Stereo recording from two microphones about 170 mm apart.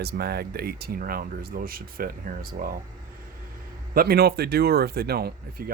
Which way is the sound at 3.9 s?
65° right (ahead or behind).